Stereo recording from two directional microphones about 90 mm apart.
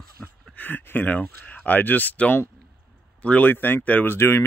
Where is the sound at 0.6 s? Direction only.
20° left (ahead or behind).